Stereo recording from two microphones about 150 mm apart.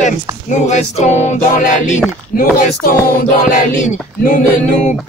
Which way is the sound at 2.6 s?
65° left (ahead or behind).